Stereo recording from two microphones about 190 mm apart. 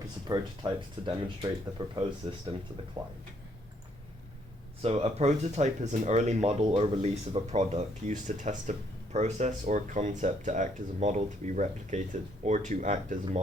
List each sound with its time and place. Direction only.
0.3 s speech: 20° right (ahead or behind)
3.0 s speech: 25° right (ahead or behind)
4.8 s speech: 30° right (ahead or behind)